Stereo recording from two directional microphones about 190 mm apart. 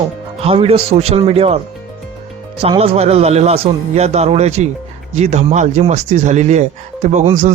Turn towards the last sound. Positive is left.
turn(degrees=-35)  # may be behind; listen again after turning